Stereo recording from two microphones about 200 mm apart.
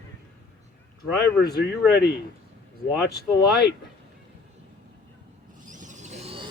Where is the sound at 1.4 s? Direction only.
50° left (ahead or behind).